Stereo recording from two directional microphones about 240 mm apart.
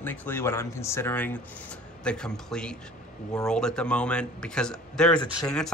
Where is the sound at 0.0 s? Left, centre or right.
Centre.